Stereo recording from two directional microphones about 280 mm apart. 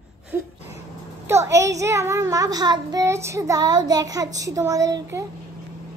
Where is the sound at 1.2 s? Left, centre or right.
Centre.